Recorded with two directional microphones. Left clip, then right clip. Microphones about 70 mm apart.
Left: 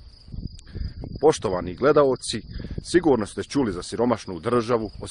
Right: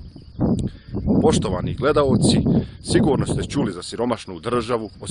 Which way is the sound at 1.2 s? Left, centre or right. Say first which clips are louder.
Left 4 dB; right.